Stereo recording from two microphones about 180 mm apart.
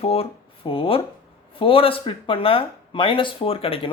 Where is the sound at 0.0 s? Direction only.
35° left (ahead or behind).